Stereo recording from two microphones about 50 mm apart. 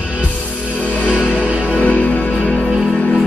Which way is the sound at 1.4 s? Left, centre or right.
Centre.